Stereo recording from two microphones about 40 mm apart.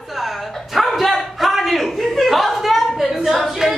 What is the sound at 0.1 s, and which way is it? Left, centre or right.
Dog, centre.